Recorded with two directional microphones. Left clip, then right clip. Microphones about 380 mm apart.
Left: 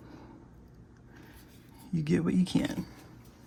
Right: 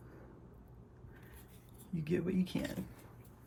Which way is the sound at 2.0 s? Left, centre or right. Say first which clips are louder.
Left 6 dB; centre.